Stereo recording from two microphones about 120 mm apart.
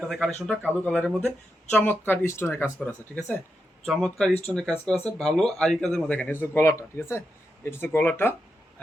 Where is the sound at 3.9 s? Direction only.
5° left (ahead or behind).